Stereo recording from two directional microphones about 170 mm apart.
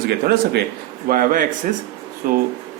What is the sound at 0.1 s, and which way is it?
Speech, 70° right (ahead or behind).